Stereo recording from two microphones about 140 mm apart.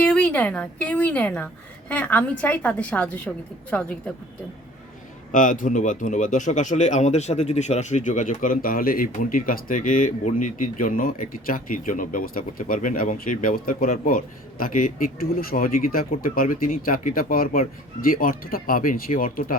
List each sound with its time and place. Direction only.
0.0 s a woman's voice: 5° left (ahead or behind)
5.3 s speech: 70° left (ahead or behind); by 19.5 s 85° left